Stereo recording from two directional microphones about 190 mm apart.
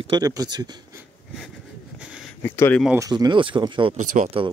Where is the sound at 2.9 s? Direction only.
20° right (ahead or behind); by 4.4 s 35° right (ahead or behind).